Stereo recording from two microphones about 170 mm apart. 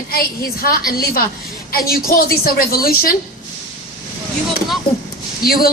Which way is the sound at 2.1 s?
65° left (ahead or behind).